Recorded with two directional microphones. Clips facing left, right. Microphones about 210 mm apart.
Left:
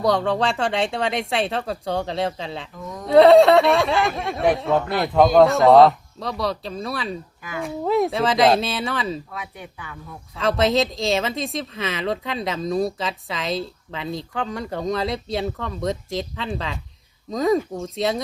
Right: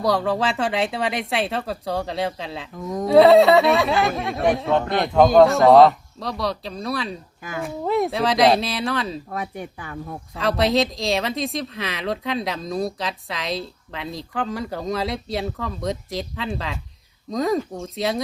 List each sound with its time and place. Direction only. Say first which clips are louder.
0.0 s speech: left 1 dB; centre (ahead or behind)
2.7 s speech: right 7 dB; 45° right (ahead or behind)
3.1 s speech: left 1 dB; centre (ahead or behind)
9.3 s speech: right 6 dB; 45° right (ahead or behind)
10.3 s speech: even; centre (ahead or behind)